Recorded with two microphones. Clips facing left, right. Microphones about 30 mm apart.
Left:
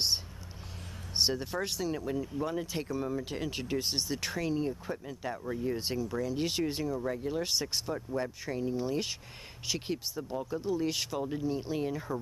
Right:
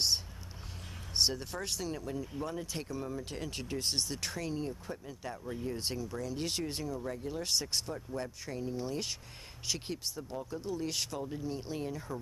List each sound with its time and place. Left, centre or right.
1.1 s speech: centre
5.7 s speech: centre
11.1 s speech: left
11.4 s speech: centre